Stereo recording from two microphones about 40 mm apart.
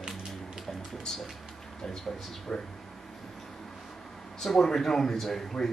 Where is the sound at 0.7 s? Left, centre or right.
Centre.